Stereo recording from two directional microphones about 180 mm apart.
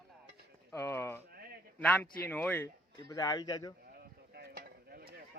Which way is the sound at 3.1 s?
20° left (ahead or behind).